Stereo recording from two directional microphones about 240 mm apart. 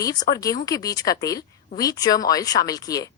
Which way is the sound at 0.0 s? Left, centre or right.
Centre.